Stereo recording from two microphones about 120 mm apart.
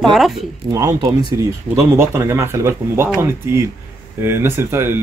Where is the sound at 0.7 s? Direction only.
25° right (ahead or behind).